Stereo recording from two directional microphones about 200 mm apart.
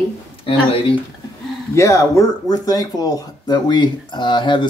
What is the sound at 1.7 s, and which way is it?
Speech, 15° left (ahead or behind).